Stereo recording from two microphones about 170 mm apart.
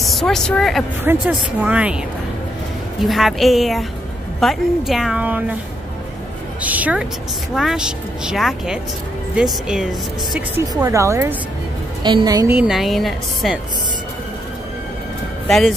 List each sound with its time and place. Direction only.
0.0 s a woman's voice: centre (ahead or behind)
1.2 s speech: 10° right (ahead or behind)
3.0 s a woman's voice: centre (ahead or behind)
6.6 s a woman's voice: 10° right (ahead or behind)
10.7 s speech: 20° right (ahead or behind)
12.0 s a woman's voice: 25° right (ahead or behind)
12.5 s a woman's voice: 5° right (ahead or behind)
15.4 s speech: centre (ahead or behind)